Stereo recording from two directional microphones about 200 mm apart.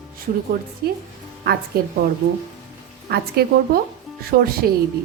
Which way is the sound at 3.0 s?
50° right (ahead or behind).